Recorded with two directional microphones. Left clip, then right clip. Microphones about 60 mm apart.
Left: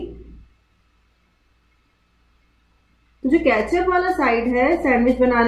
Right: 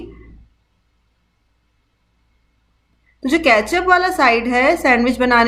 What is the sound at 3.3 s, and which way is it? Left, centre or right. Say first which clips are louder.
A woman's voice: right 4 dB; right.